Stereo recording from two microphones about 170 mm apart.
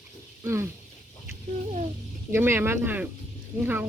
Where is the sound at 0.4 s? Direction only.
15° right (ahead or behind).